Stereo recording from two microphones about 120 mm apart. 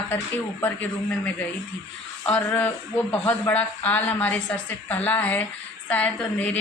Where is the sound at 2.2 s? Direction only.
10° left (ahead or behind).